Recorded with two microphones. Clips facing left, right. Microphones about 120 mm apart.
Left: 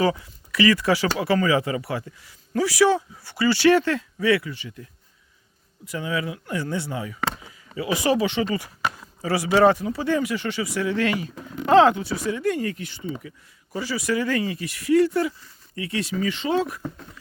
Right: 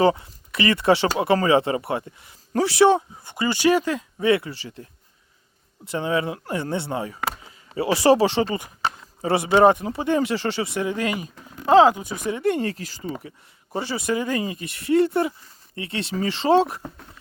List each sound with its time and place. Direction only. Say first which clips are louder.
0.0 s speech: right 4 dB; 30° right (ahead or behind)
10.2 s speech: right 2 dB; 30° right (ahead or behind); by 12.2 s 15° right (ahead or behind)
12.3 s speech: right 3 dB; 25° right (ahead or behind)
13.7 s speech: even; 25° right (ahead or behind)